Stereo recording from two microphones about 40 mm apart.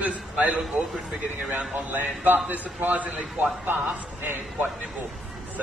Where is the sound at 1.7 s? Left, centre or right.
Right.